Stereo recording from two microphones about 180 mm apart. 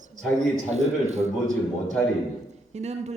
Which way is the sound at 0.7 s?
40° right (ahead or behind).